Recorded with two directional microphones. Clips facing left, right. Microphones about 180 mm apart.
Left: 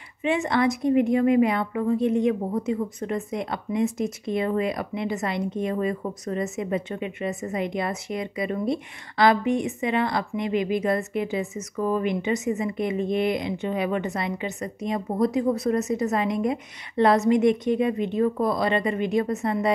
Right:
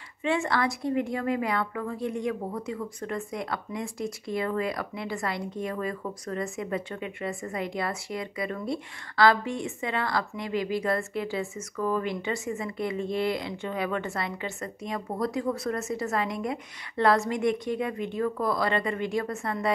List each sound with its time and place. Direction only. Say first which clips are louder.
0.2 s a woman's voice: left 4 dB; 20° left (ahead or behind)